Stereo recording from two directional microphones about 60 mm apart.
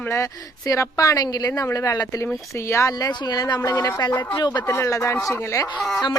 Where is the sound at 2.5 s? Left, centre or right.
Left.